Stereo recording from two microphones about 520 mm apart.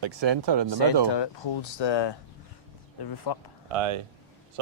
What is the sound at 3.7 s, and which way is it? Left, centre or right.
Speech, right.